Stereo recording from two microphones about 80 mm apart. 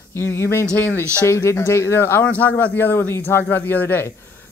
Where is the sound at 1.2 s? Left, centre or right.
Left.